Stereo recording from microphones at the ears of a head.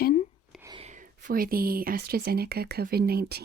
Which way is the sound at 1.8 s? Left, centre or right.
Right.